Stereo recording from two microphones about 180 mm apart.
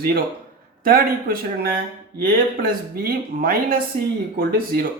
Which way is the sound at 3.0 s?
55° right (ahead or behind).